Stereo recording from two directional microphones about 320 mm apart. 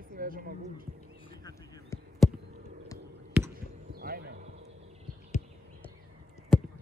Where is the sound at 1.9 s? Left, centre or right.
Centre.